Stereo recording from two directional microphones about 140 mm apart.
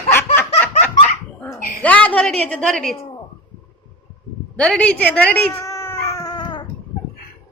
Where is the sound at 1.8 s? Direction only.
10° left (ahead or behind).